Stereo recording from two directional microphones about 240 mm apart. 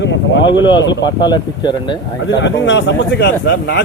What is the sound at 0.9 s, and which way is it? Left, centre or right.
Speech, centre.